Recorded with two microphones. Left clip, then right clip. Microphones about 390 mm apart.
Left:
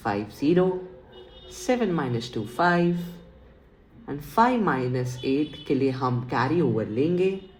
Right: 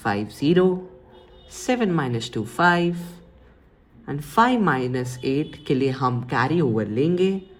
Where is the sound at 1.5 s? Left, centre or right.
Right.